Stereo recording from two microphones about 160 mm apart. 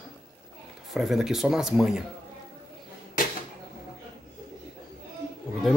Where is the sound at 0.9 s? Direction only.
Centre (ahead or behind).